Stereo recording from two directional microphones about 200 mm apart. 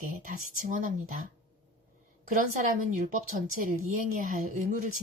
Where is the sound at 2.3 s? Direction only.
45° right (ahead or behind).